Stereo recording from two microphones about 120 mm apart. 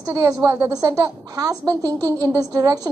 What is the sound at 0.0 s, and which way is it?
A woman's voice, 25° right (ahead or behind).